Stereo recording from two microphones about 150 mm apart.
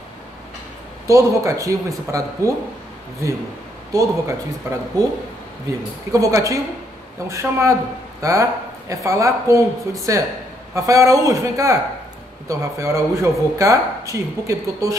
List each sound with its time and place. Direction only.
1.0 s speech: 20° right (ahead or behind)
3.9 s speech: 20° right (ahead or behind)
6.1 s speech: 20° right (ahead or behind)